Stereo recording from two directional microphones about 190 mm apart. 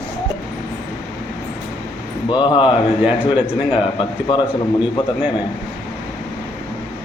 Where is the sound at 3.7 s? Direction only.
25° left (ahead or behind).